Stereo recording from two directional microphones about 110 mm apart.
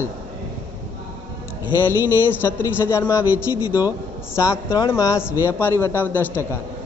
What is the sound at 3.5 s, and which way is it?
Speech, 35° left (ahead or behind).